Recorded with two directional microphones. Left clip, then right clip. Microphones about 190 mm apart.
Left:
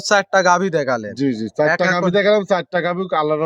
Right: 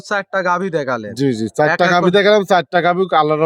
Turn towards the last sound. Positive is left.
turn(degrees=-65)  # may be behind; listen again after turning